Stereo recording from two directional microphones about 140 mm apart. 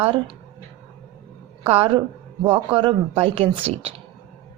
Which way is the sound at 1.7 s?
40° right (ahead or behind).